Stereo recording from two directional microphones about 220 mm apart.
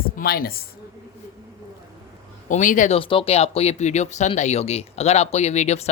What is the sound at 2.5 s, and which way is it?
Speech, 35° left (ahead or behind).